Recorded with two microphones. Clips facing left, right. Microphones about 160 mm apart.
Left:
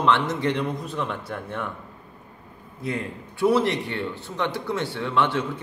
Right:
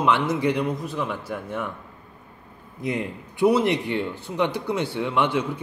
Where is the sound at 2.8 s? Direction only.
15° right (ahead or behind).